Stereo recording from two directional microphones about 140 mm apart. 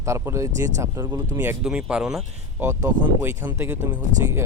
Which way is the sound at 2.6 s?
15° right (ahead or behind).